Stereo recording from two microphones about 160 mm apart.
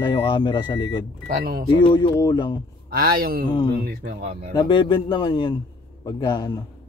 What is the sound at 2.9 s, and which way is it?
Speech, 65° right (ahead or behind).